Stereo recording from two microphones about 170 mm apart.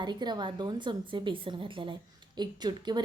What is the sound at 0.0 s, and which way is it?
A woman's voice, 25° right (ahead or behind).